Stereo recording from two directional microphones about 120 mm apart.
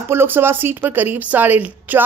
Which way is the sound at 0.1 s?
20° right (ahead or behind).